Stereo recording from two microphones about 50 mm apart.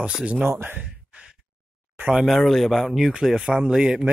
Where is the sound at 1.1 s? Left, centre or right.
Right.